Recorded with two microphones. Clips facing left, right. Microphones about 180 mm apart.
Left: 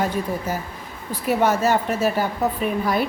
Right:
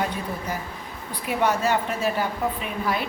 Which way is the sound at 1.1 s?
45° left (ahead or behind).